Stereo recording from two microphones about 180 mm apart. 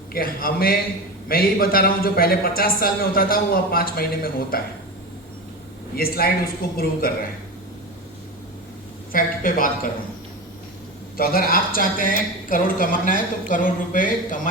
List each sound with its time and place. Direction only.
0.1 s a woman's voice: 55° left (ahead or behind)
6.0 s a man's voice: 55° left (ahead or behind)
9.1 s a woman's voice: 50° left (ahead or behind)
11.2 s a woman's voice: 55° left (ahead or behind)